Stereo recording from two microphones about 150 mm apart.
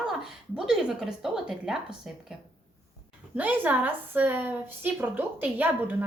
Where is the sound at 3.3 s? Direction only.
10° right (ahead or behind).